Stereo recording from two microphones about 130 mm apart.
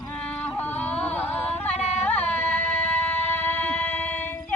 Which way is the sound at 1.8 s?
60° left (ahead or behind).